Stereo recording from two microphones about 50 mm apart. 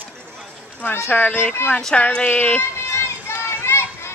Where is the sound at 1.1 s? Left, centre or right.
Left.